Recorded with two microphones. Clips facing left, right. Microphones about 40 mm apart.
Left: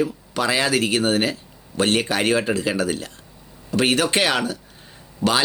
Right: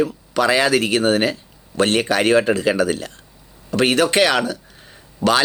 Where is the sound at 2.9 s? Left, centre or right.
Right.